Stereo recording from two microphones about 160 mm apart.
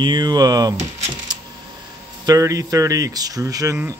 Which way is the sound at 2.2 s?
20° right (ahead or behind).